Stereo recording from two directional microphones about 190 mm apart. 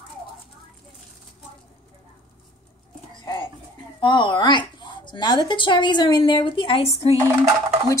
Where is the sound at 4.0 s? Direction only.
25° left (ahead or behind).